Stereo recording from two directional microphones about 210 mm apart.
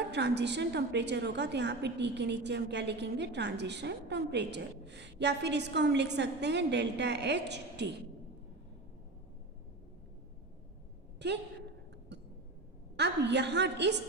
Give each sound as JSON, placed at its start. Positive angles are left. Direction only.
{"t": 0.1, "sound": "a woman's voice", "side_deg": -55}
{"t": 11.2, "sound": "a woman's voice", "side_deg": -55}
{"t": 12.9, "sound": "a woman's voice", "side_deg": -55}